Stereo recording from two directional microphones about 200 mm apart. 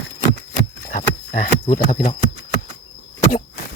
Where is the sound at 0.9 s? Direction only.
45° left (ahead or behind).